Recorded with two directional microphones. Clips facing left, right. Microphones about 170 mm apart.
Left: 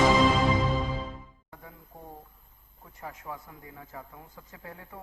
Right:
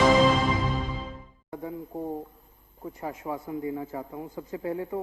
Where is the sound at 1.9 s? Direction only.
35° right (ahead or behind).